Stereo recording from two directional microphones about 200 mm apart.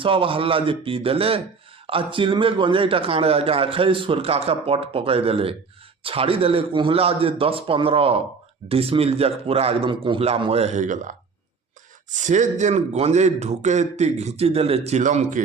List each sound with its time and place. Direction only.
0.0 s a man's voice: 25° right (ahead or behind)